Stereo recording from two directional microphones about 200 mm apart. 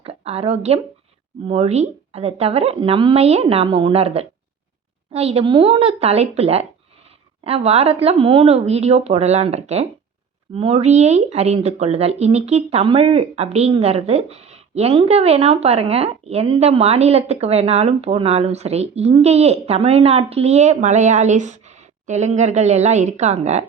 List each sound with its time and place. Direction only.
0.0 s a woman's voice: 30° right (ahead or behind)